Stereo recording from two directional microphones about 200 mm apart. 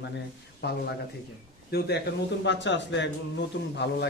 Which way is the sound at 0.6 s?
55° left (ahead or behind).